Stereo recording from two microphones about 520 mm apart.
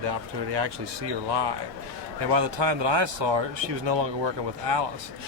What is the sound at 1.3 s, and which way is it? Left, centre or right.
Speech, right.